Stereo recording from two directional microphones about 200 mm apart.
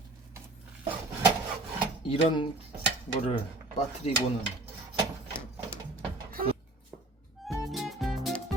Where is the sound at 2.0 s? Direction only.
25° left (ahead or behind).